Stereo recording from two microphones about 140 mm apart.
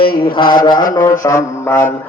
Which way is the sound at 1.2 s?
20° left (ahead or behind).